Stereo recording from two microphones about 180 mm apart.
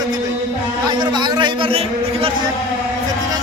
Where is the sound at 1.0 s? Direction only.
25° right (ahead or behind).